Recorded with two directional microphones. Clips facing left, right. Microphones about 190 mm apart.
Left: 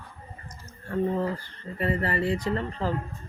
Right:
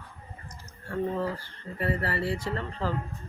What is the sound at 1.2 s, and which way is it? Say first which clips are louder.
Speech: left 2 dB; 20° left (ahead or behind).